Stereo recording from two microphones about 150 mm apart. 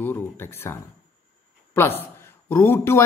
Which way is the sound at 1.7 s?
15° left (ahead or behind).